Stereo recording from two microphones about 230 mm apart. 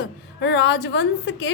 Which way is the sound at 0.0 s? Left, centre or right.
Left.